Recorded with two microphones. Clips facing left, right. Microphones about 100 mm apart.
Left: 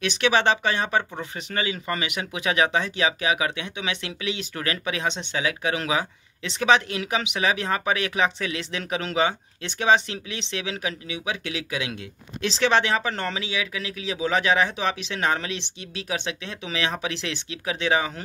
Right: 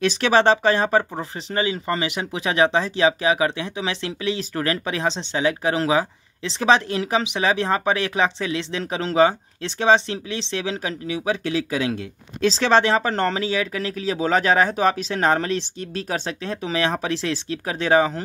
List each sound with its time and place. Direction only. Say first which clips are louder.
0.0 s speech: right 4 dB; 35° right (ahead or behind)